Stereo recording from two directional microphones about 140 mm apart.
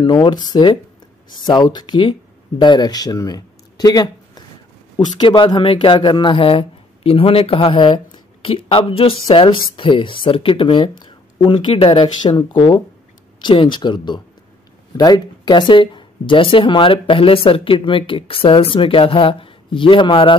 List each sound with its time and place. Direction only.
0.0 s speech: 30° left (ahead or behind)